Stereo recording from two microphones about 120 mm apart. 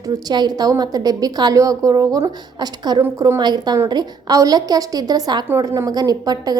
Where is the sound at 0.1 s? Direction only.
35° right (ahead or behind).